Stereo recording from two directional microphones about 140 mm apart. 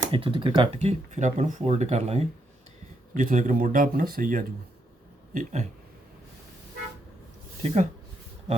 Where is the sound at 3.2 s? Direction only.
65° right (ahead or behind).